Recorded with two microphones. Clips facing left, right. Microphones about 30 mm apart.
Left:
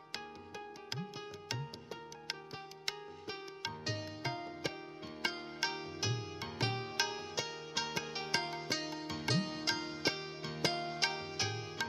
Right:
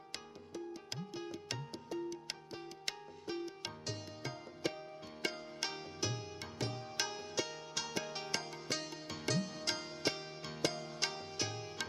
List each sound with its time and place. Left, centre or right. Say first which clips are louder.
2.8 s music: left 5 dB; centre
3.3 s music: left 1 dB; centre
4.6 s music: right 3 dB; centre
5.2 s music: left 2 dB; left
5.6 s music: left 3 dB; centre
6.6 s music: left 4 dB; left
7.0 s music: right 1 dB; centre
9.3 s music: left 1 dB; left
9.7 s music: left 2 dB; centre
10.7 s music: left 6 dB; left
11.0 s music: left 3 dB; left